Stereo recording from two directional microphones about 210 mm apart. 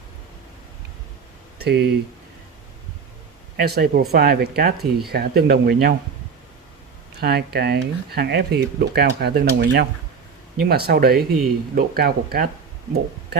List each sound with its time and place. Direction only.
1.5 s speech: 50° right (ahead or behind)
3.6 s speech: 50° right (ahead or behind)
7.2 s speech: 50° right (ahead or behind)